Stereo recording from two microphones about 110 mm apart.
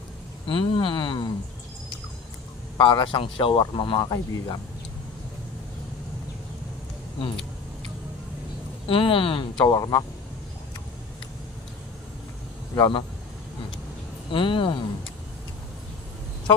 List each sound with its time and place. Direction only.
0.5 s a sound: 50° left (ahead or behind)
2.8 s speech: 45° left (ahead or behind)
4.1 s speech: 30° left (ahead or behind)
8.8 s speech: 55° left (ahead or behind)
9.7 s speech: 35° left (ahead or behind)
12.7 s speech: 35° left (ahead or behind)
14.3 s speech: 50° left (ahead or behind)